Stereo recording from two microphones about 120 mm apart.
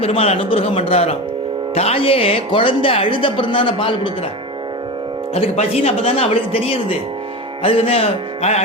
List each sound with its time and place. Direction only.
0.0 s speech: 55° left (ahead or behind)
5.3 s speech: 60° left (ahead or behind)